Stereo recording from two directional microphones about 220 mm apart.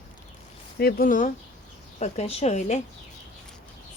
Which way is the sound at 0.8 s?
45° left (ahead or behind).